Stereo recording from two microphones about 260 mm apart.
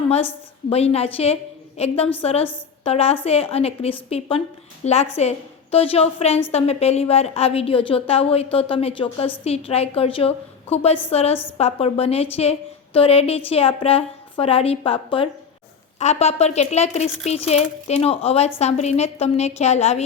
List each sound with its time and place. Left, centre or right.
0.7 s a woman's voice: left